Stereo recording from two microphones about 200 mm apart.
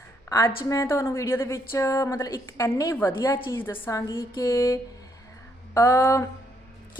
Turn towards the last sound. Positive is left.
turn(degrees=15)  # may be behind; listen again after turning